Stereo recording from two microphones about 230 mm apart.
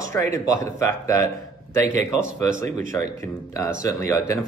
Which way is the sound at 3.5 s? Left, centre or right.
Centre.